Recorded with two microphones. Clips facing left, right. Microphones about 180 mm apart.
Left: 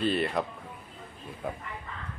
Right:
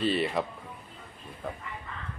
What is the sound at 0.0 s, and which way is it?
Speech, centre (ahead or behind).